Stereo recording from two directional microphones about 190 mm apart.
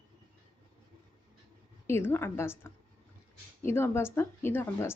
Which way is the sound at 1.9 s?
10° left (ahead or behind).